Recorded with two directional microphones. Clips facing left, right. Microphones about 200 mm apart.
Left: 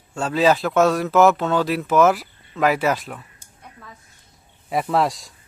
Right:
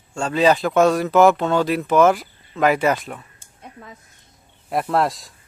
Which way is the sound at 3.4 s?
20° right (ahead or behind).